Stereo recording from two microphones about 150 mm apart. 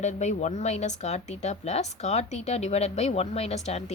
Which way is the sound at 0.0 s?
50° left (ahead or behind).